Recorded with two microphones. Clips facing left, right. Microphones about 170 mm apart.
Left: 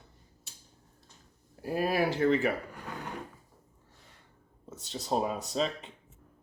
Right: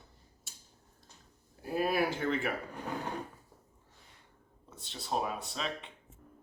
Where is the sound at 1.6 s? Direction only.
35° left (ahead or behind).